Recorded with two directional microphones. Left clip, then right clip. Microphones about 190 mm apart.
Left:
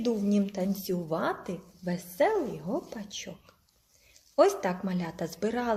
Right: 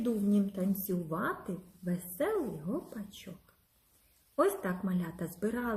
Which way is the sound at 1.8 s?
10° right (ahead or behind).